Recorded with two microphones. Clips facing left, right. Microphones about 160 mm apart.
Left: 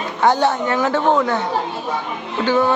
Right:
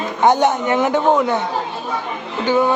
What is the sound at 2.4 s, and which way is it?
Speech, 15° right (ahead or behind).